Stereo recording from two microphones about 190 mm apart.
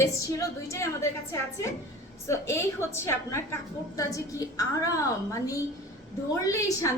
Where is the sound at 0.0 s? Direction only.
15° left (ahead or behind).